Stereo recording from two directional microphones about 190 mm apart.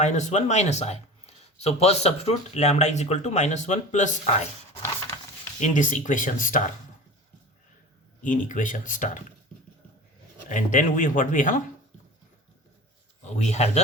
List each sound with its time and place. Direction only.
0.0 s speech: 40° left (ahead or behind)
5.5 s speech: 40° left (ahead or behind)
8.2 s speech: 45° left (ahead or behind)
10.5 s speech: 45° left (ahead or behind)
13.2 s speech: 35° left (ahead or behind)